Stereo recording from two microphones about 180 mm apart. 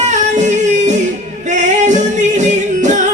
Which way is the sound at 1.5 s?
40° right (ahead or behind).